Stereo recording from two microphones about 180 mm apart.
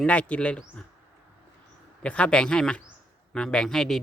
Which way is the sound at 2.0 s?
5° left (ahead or behind).